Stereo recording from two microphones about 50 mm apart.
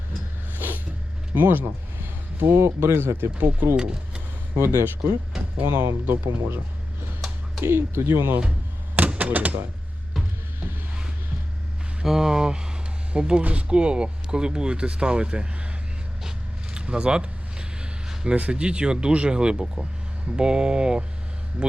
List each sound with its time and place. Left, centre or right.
1.4 s speech: right
3.8 s speech: centre
4.5 s speech: right
6.1 s speech: right
7.6 s speech: right
9.0 s speech: right
12.0 s speech: centre
16.7 s a sound: centre
18.3 s speech: right